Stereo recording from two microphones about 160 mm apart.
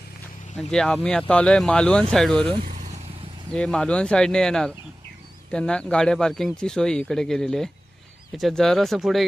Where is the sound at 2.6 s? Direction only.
55° right (ahead or behind).